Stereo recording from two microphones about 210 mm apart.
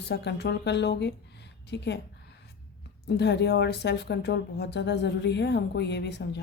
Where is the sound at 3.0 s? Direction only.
50° left (ahead or behind).